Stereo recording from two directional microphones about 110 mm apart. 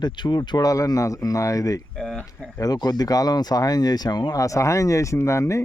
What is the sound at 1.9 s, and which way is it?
Speech, 5° left (ahead or behind).